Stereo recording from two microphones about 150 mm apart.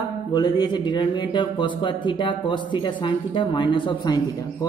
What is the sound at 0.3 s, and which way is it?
A woman's voice, 25° left (ahead or behind).